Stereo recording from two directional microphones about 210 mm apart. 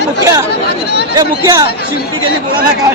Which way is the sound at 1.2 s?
20° right (ahead or behind).